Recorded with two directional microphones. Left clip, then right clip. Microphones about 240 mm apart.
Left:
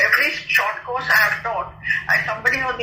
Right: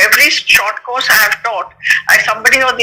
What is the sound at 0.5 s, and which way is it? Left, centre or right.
A man's voice, right.